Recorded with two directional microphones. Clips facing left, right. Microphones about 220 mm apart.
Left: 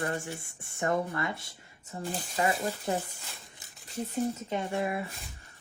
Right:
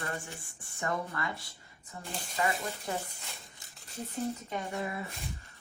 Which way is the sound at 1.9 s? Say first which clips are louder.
Left 8 dB; 30° left (ahead or behind).